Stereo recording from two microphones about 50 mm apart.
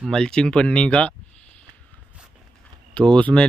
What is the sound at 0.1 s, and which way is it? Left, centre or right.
Speech, centre.